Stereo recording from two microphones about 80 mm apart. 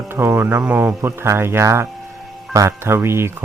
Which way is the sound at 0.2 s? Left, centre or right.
Right.